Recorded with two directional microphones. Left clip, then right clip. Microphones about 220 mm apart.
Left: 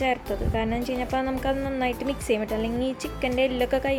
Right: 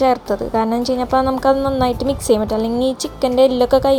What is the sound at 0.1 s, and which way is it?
Speech, 10° right (ahead or behind).